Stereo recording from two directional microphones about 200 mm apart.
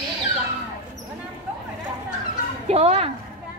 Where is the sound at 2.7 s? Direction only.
30° right (ahead or behind).